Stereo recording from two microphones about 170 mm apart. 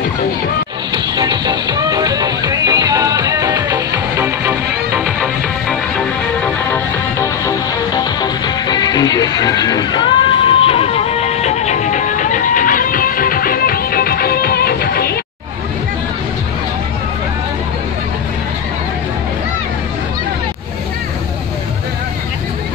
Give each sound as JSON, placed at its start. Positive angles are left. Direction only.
{"t": 0.9, "sound": "music", "side_deg": -25}
{"t": 5.0, "sound": "music", "side_deg": 5}